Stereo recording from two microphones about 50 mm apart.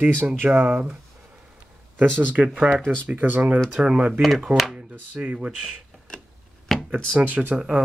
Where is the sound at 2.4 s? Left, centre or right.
Centre.